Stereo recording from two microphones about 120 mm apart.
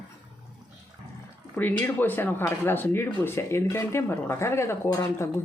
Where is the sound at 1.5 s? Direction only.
15° left (ahead or behind).